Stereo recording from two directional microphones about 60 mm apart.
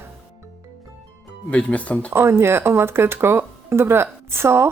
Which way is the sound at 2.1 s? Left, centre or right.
Right.